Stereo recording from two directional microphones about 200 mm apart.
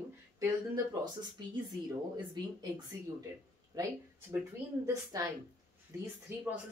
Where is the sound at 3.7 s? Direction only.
20° right (ahead or behind).